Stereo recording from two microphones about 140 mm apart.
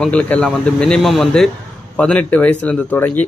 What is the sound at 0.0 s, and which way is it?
A man's voice, 10° left (ahead or behind).